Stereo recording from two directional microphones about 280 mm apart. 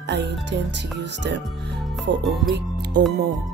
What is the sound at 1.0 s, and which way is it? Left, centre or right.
Speech, right.